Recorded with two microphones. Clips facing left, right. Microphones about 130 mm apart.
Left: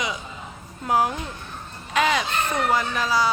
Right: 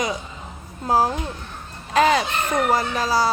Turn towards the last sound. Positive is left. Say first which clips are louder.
# right 2 dB
turn(degrees=-40)  # may be behind; listen again after turning